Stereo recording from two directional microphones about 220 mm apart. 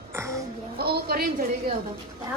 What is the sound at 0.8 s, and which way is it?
Speech, 45° right (ahead or behind).